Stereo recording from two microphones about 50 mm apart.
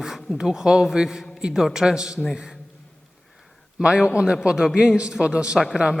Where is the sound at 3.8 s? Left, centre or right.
Right.